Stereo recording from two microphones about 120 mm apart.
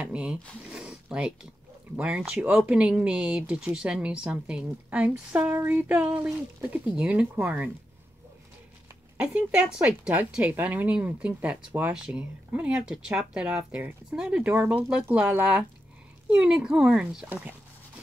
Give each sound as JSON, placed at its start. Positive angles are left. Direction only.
{"t": 0.0, "sound": "a sound", "side_deg": -10}
{"t": 2.0, "sound": "speech", "side_deg": -10}
{"t": 9.1, "sound": "speech", "side_deg": -10}